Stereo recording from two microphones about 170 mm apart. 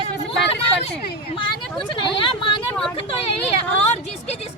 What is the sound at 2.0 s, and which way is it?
Speech, 30° left (ahead or behind).